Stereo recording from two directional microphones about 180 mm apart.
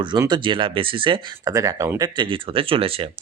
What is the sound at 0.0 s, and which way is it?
Speech, 25° right (ahead or behind).